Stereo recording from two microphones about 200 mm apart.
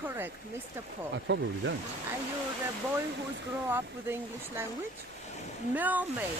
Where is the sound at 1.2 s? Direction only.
65° right (ahead or behind).